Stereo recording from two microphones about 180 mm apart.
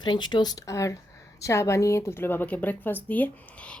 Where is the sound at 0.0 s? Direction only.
25° left (ahead or behind).